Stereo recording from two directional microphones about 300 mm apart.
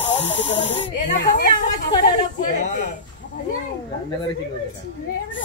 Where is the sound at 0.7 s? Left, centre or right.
Left.